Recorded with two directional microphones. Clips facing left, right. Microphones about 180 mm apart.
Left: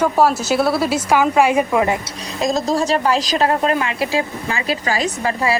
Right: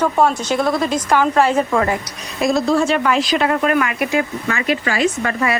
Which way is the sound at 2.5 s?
40° left (ahead or behind).